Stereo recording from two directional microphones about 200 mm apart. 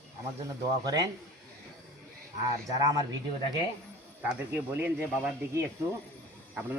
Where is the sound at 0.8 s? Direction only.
20° right (ahead or behind).